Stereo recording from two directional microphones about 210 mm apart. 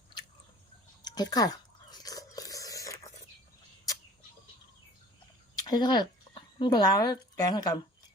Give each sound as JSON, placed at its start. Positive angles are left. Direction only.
{"t": 1.0, "sound": "biting", "side_deg": 20}
{"t": 5.6, "sound": "a woman's voice", "side_deg": 20}